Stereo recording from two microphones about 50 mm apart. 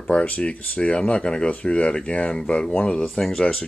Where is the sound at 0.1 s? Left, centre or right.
Left.